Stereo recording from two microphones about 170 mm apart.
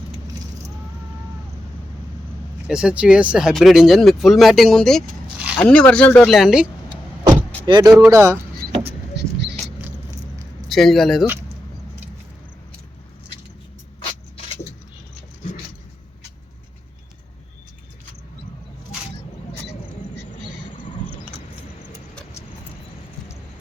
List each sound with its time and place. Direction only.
2.6 s speech: 5° right (ahead or behind)
7.6 s speech: 25° right (ahead or behind)
8.7 s vehicle: 35° right (ahead or behind)
10.7 s speech: centre (ahead or behind)
14.0 s a sound: 30° left (ahead or behind)